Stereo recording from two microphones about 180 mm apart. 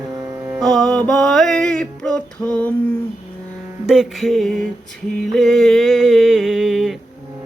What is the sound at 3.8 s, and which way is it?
Music, centre (ahead or behind).